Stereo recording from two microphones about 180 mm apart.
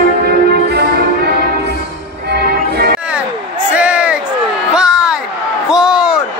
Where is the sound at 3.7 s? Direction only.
5° right (ahead or behind).